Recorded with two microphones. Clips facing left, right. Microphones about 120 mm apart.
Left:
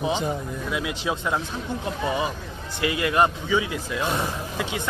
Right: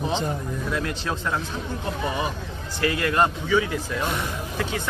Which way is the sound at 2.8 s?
15° left (ahead or behind).